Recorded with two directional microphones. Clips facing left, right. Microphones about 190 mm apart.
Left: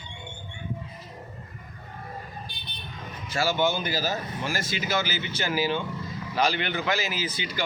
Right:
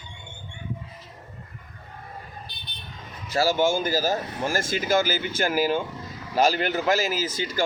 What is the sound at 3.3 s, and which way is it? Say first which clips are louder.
Speech: right 4 dB; 40° right (ahead or behind).